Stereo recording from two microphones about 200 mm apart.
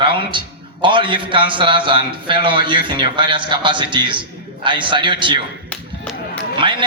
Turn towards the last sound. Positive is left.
turn(degrees=-25)  # may be behind; listen again after turning